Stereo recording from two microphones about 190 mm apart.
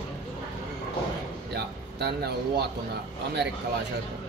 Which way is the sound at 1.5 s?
60° right (ahead or behind).